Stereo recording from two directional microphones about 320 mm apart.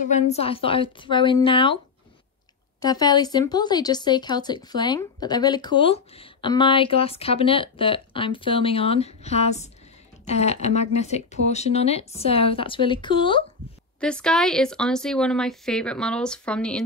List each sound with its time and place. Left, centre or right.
0.0 s speech: left
2.8 s speech: centre
13.9 s speech: centre